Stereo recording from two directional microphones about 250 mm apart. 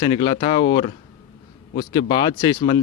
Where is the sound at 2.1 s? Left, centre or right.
Centre.